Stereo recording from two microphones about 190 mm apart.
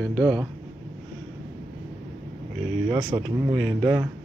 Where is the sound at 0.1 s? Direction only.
20° right (ahead or behind).